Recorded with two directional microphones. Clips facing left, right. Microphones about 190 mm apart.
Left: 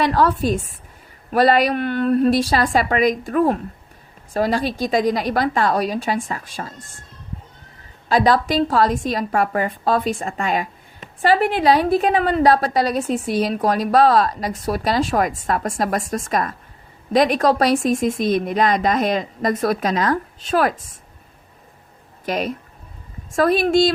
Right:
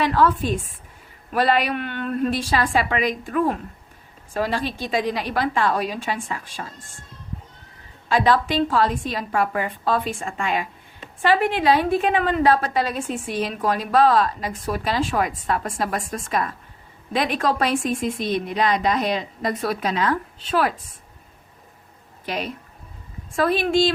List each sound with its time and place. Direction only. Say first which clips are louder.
0.0 s a woman's voice: left 2 dB; 40° left (ahead or behind)
8.1 s a woman's voice: left 3 dB; 40° left (ahead or behind)
22.3 s speech: left 5 dB; 45° left (ahead or behind)